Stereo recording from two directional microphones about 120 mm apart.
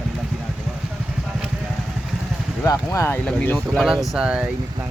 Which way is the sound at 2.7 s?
25° left (ahead or behind).